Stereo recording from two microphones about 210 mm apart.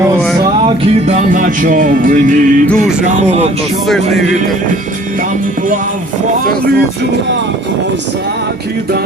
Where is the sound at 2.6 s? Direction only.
Centre (ahead or behind).